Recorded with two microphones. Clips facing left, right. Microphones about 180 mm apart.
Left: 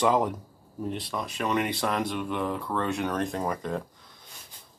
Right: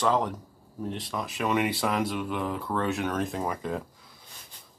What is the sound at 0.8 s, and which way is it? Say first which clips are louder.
Speech: left 1 dB; centre (ahead or behind).